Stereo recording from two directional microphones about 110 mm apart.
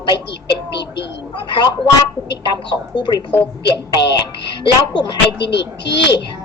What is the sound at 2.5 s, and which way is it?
Speech, 45° left (ahead or behind).